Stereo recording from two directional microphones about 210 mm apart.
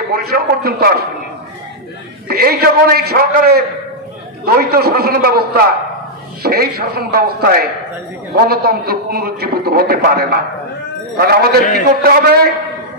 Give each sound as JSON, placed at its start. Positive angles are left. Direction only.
{"t": 0.1, "sound": "a man's voice", "side_deg": -50}
{"t": 2.2, "sound": "a man's voice", "side_deg": -45}